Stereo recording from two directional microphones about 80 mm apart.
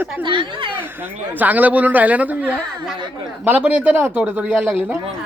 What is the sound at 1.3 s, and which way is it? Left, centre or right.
Speech, right.